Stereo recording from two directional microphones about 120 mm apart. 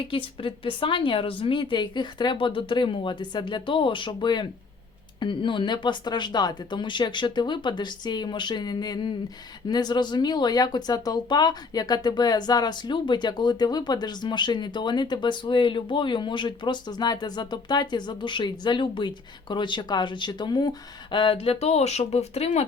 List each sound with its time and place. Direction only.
0.1 s speech: 45° left (ahead or behind)